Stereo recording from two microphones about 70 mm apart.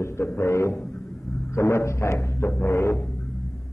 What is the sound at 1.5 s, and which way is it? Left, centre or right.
Mantra, left.